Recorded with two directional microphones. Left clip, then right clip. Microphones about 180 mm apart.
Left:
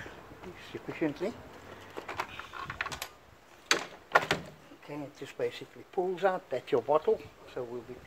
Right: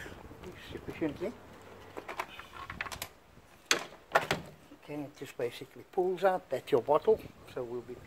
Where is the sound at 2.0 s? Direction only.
15° right (ahead or behind).